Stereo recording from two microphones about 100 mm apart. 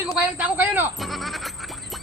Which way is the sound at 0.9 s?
Centre (ahead or behind).